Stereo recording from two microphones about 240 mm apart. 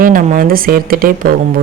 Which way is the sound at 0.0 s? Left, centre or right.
Right.